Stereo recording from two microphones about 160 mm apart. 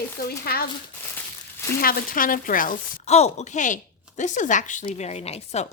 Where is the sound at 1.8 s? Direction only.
65° left (ahead or behind).